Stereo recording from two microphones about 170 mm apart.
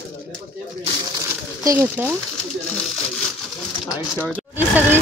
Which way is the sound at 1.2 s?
20° right (ahead or behind).